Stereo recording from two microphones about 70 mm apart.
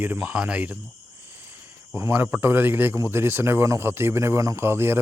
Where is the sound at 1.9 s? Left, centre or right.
Right.